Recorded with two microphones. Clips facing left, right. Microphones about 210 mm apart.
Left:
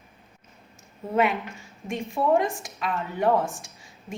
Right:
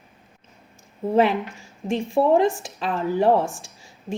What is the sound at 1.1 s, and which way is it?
A woman's voice, 30° right (ahead or behind).